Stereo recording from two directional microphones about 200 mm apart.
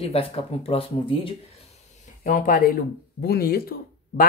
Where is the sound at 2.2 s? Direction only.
45° left (ahead or behind).